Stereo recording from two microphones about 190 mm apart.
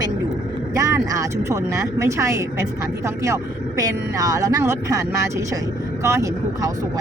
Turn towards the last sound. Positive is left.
turn(degrees=-15)  # may be behind; listen again after turning